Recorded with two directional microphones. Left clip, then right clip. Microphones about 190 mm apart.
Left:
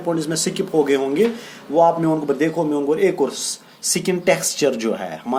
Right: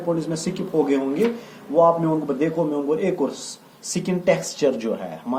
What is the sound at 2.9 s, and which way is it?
Speech, 45° left (ahead or behind).